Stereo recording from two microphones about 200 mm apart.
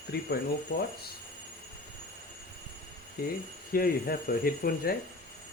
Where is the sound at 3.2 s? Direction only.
50° left (ahead or behind).